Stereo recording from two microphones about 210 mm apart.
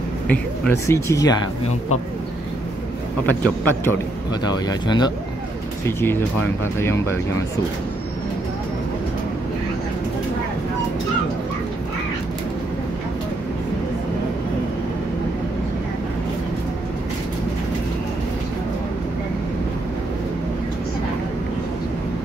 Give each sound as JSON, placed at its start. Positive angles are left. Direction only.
{"t": 0.3, "sound": "speech", "side_deg": 10}
{"t": 3.3, "sound": "speech", "side_deg": 10}
{"t": 4.3, "sound": "speech", "side_deg": 20}